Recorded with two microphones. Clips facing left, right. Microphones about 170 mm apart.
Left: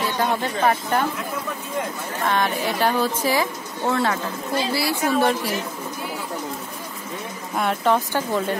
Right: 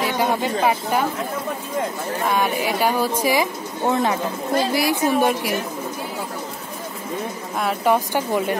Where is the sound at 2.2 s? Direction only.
10° right (ahead or behind).